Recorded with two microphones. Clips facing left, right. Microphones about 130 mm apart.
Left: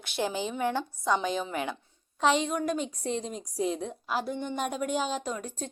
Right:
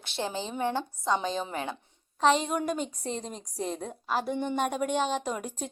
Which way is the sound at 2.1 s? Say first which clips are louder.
Right 1 dB; centre (ahead or behind).